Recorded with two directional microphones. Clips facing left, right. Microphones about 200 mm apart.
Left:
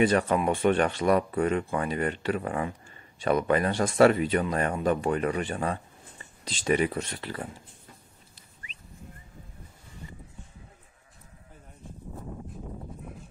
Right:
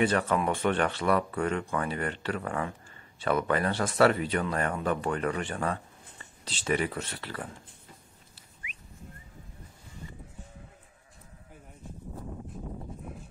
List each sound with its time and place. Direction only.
0.0 s speech: 15° left (ahead or behind)